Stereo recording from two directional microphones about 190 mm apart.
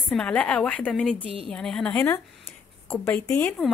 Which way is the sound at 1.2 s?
30° right (ahead or behind).